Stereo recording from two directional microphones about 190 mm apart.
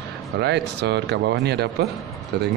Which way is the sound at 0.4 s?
60° right (ahead or behind).